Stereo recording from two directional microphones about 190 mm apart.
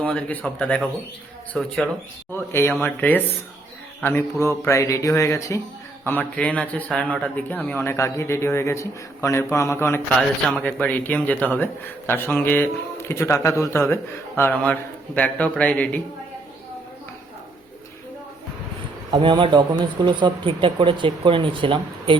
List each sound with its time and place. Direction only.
0.0 s speech: 5° left (ahead or behind)
2.3 s a man's voice: 15° left (ahead or behind)
19.1 s speech: 25° right (ahead or behind)